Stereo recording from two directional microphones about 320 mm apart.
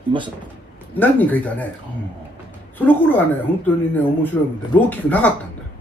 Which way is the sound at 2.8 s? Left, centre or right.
Centre.